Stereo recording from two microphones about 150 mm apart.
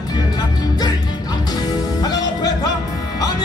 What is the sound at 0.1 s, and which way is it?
Music, 25° left (ahead or behind).